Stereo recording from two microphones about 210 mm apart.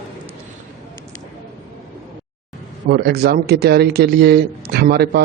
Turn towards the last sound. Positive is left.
turn(degrees=-50)  # may be behind; listen again after turning